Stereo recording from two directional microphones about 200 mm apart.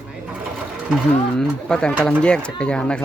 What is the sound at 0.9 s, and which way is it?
Speech, 5° left (ahead or behind).